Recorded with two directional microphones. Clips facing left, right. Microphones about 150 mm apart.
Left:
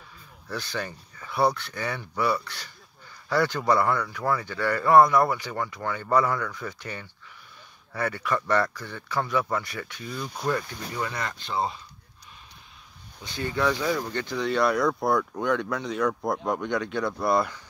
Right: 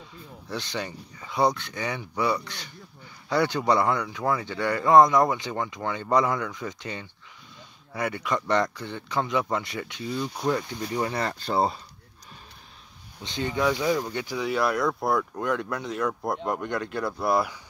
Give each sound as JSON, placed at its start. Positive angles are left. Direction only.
{"t": 0.5, "sound": "speech", "side_deg": -20}
{"t": 13.2, "sound": "speech", "side_deg": -20}